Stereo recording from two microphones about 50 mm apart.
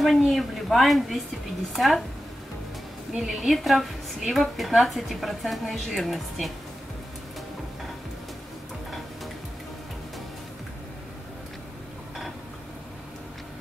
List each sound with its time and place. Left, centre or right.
0.0 s a woman's voice: centre
3.3 s a woman's voice: centre